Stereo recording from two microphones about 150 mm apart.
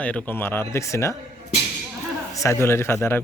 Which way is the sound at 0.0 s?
10° left (ahead or behind).